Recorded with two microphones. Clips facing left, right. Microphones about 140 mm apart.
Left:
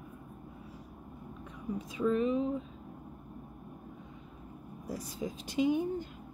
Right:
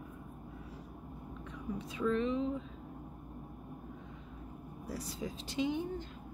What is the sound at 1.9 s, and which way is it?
Speech, 10° left (ahead or behind).